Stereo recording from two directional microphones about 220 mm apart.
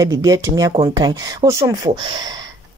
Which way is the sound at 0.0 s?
15° right (ahead or behind).